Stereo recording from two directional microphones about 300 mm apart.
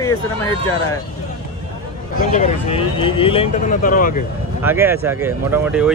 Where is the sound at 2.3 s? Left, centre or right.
Left.